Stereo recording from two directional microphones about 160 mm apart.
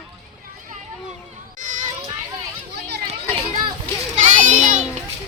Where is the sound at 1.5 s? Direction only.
55° right (ahead or behind).